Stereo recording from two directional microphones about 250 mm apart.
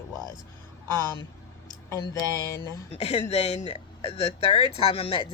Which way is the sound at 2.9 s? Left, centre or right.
Left.